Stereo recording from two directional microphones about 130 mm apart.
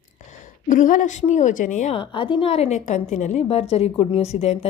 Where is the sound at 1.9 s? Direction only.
40° left (ahead or behind).